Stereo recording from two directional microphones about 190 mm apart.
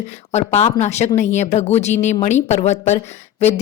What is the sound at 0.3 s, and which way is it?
Speech, 35° left (ahead or behind).